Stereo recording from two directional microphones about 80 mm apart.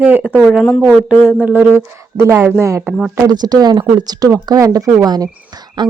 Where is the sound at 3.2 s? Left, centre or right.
Right.